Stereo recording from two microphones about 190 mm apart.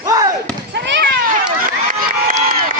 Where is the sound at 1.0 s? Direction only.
45° right (ahead or behind).